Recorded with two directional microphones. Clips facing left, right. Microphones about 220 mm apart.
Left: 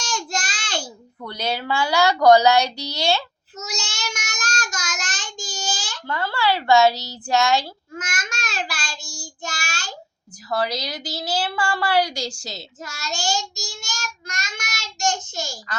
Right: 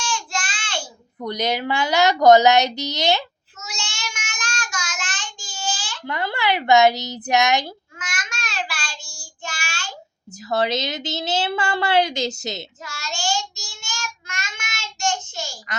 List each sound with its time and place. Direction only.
0.0 s child singing: 40° left (ahead or behind)
1.2 s a woman's voice: 20° right (ahead or behind)
3.6 s child singing: 40° left (ahead or behind)
6.1 s a woman's voice: 20° right (ahead or behind)
7.9 s child singing: 40° left (ahead or behind)
10.5 s a woman's voice: 25° right (ahead or behind)
12.8 s child singing: 40° left (ahead or behind)